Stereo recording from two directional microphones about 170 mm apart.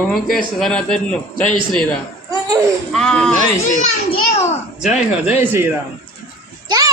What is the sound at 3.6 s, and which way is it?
Speech, 45° left (ahead or behind).